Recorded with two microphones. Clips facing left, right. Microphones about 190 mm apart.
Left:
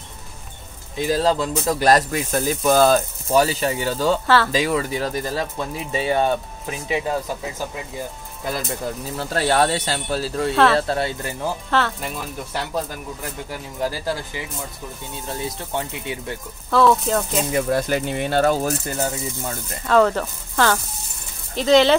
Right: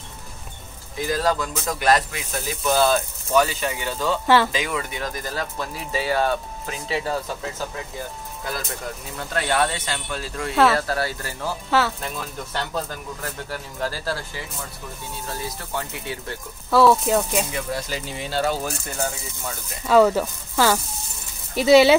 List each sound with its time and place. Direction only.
0.9 s speech: 25° left (ahead or behind)
9.1 s speech: 35° left (ahead or behind)
10.5 s speech: 5° right (ahead or behind)
10.8 s speech: 25° left (ahead or behind)
16.7 s speech: 5° right (ahead or behind)
17.5 s speech: 50° left (ahead or behind)
19.9 s speech: 5° right (ahead or behind)